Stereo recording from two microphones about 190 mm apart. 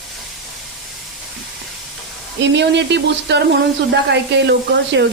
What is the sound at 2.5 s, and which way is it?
Speech, 65° right (ahead or behind).